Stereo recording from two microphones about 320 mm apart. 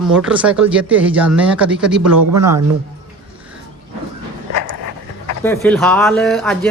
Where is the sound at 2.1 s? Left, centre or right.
Right.